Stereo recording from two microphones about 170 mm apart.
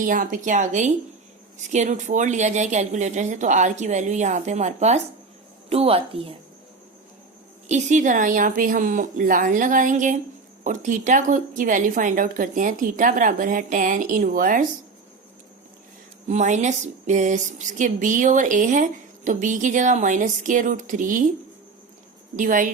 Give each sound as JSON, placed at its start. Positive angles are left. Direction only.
{"t": 0.0, "sound": "a woman's voice", "side_deg": -50}
{"t": 7.7, "sound": "speech", "side_deg": -45}
{"t": 16.2, "sound": "speech", "side_deg": -45}
{"t": 22.4, "sound": "speech", "side_deg": -50}